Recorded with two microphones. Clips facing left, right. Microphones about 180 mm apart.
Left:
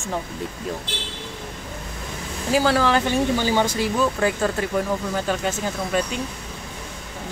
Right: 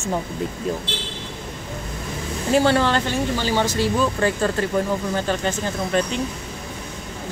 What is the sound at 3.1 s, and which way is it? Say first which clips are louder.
Speech: left 2 dB; 15° left (ahead or behind).